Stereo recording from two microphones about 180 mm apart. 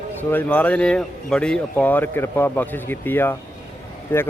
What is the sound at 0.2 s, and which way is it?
Speech, 10° left (ahead or behind).